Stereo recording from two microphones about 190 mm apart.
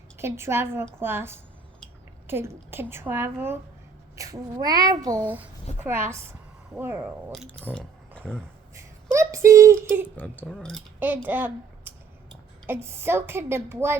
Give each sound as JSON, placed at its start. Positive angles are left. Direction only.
{"t": 0.2, "sound": "a woman's voice", "side_deg": -15}
{"t": 5.2, "sound": "a woman's voice", "side_deg": -10}
{"t": 7.7, "sound": "a sound", "side_deg": 5}
{"t": 8.7, "sound": "a sound", "side_deg": -15}
{"t": 10.2, "sound": "speech", "side_deg": 5}
{"t": 11.0, "sound": "a woman's voice", "side_deg": -10}